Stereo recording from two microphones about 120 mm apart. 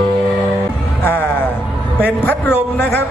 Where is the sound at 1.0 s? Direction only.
15° left (ahead or behind).